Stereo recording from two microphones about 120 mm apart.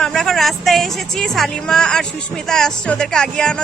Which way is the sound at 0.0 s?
5° left (ahead or behind).